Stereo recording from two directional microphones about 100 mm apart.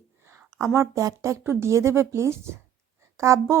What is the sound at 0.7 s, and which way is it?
A woman's voice, 30° right (ahead or behind).